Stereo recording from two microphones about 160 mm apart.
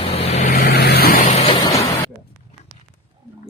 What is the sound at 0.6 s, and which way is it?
Vehicle, 90° left.